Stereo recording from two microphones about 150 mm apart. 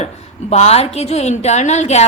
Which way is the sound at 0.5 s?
45° left (ahead or behind).